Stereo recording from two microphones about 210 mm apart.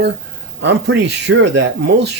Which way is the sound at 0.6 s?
55° right (ahead or behind).